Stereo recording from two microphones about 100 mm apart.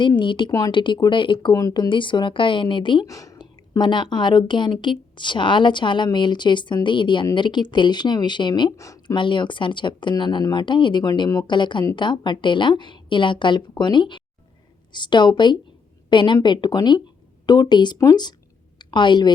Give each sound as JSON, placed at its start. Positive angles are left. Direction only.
{"t": 0.2, "sound": "a woman's voice", "side_deg": 55}
{"t": 3.1, "sound": "speech", "side_deg": 35}
{"t": 3.3, "sound": "a woman's voice", "side_deg": 50}
{"t": 8.7, "sound": "speech", "side_deg": 30}
{"t": 9.0, "sound": "a woman's voice", "side_deg": 55}